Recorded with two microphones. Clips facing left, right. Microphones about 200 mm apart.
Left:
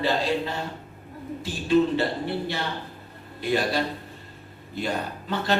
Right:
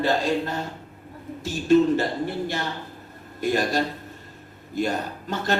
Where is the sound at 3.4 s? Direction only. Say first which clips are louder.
Right 1 dB; 45° right (ahead or behind).